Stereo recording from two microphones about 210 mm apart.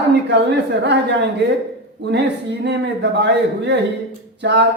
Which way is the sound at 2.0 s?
55° right (ahead or behind).